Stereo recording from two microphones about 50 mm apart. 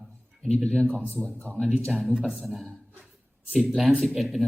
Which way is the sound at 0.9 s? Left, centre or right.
Right.